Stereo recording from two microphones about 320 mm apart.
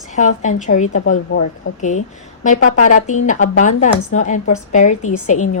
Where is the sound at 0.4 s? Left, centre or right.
Left.